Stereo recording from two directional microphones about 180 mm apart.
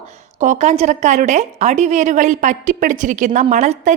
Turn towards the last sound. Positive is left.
turn(degrees=-40)  # may be behind; listen again after turning